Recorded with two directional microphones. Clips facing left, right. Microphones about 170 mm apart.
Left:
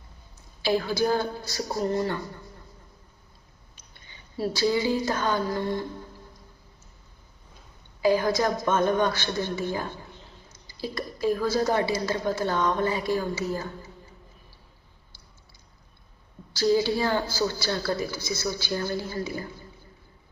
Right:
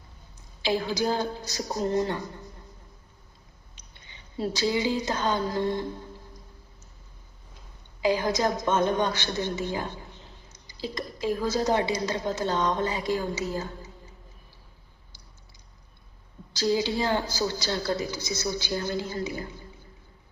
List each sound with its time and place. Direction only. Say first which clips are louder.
0.6 s a woman's voice: left 2 dB; 20° right (ahead or behind)
4.4 s a woman's voice: left 2 dB; 20° right (ahead or behind)
8.0 s a woman's voice: left 2 dB; 20° right (ahead or behind)
16.5 s a woman's voice: left 3 dB; 20° right (ahead or behind)